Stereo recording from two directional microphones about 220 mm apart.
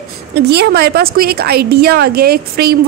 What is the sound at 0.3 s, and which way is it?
A woman's voice, 50° right (ahead or behind).